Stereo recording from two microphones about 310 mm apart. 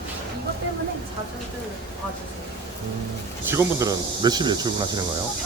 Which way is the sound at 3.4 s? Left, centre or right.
Centre.